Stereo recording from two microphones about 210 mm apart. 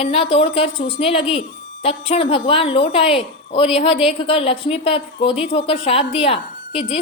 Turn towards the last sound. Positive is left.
turn(degrees=30)  # may be behind; listen again after turning